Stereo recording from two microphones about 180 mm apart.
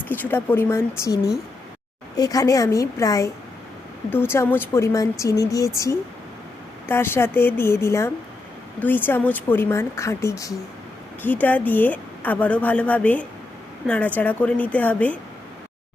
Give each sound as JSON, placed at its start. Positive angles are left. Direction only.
{"t": 0.2, "sound": "speech", "side_deg": 10}